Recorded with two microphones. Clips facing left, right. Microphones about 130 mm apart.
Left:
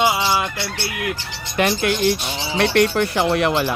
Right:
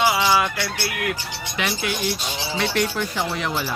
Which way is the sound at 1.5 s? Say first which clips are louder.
Left 7 dB; 50° left (ahead or behind).